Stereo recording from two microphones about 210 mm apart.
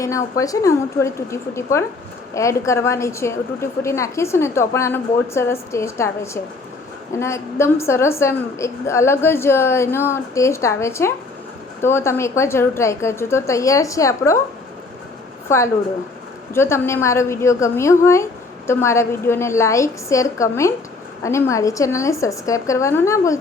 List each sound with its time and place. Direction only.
0.0 s a woman's voice: 15° left (ahead or behind)
15.4 s a woman's voice: 15° left (ahead or behind)